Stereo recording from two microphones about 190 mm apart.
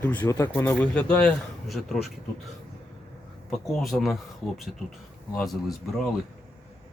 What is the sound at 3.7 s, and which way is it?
Speech, centre (ahead or behind).